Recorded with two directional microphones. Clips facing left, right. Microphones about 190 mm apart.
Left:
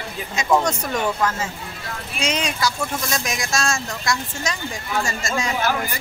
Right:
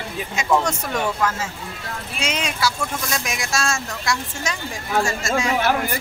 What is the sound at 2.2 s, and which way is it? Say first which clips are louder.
Speech: left 1 dB; 5° right (ahead or behind).